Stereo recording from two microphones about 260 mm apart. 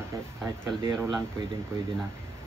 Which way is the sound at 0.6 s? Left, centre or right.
Centre.